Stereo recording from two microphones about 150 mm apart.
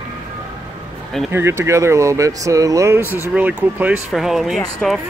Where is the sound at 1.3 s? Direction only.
15° right (ahead or behind).